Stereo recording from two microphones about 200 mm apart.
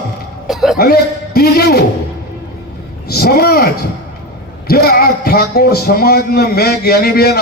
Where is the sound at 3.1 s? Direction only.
50° left (ahead or behind).